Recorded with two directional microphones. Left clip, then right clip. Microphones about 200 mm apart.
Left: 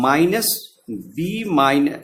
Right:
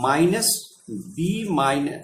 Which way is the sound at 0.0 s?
45° left (ahead or behind).